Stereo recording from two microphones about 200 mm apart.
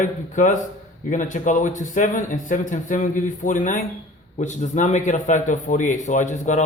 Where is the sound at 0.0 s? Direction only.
40° left (ahead or behind).